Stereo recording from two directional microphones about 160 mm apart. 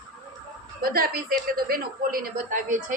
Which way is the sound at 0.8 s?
65° right (ahead or behind).